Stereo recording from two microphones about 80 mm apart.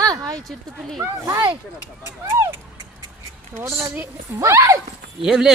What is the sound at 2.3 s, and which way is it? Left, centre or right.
Speech, right.